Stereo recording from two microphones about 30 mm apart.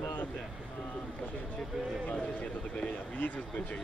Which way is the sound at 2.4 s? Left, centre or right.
Left.